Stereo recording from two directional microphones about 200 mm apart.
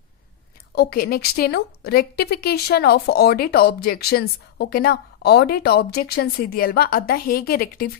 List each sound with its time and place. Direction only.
0.7 s a woman's voice: 50° left (ahead or behind)